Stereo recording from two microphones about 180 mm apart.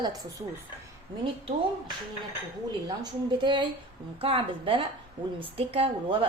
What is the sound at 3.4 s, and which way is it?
A woman's voice, 25° right (ahead or behind).